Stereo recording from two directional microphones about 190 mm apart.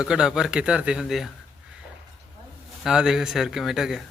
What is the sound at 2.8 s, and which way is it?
Speech, 5° right (ahead or behind).